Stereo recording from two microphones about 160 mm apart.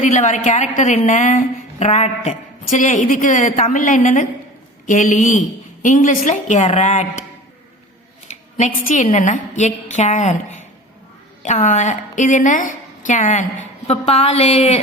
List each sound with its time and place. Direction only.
0.0 s a woman's voice: 50° left (ahead or behind)
8.3 s a woman's voice: 50° left (ahead or behind)